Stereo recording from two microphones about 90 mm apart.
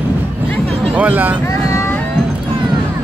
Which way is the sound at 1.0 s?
20° right (ahead or behind).